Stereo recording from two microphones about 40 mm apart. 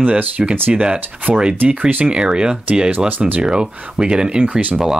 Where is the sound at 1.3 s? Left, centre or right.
Right.